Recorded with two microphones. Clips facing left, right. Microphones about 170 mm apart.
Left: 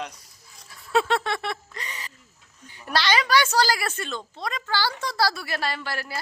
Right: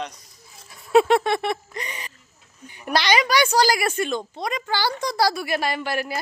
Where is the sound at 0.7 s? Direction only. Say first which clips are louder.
Right 6 dB; 20° right (ahead or behind).